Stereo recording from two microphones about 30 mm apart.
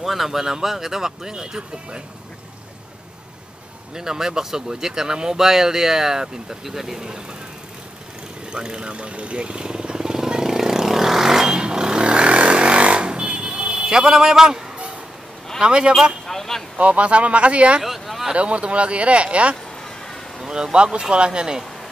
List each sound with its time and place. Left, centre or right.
0.0 s speech: centre; by 2.0 s right
3.9 s speech: centre
8.5 s vehicle: right; by 11.5 s centre
11.5 s vehicle: right
14.2 s speech: centre
15.6 s speech: right
16.3 s a sound: centre
16.7 s speech: right
17.8 s a sound: centre
18.3 s speech: right
20.4 s speech: right
20.7 s speech: right